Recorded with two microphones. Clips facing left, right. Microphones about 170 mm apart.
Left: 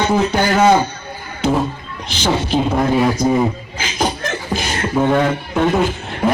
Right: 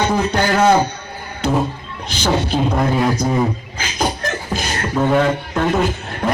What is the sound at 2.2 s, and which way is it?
A man's voice, 5° left (ahead or behind).